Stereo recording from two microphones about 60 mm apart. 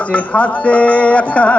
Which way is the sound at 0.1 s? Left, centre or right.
Left.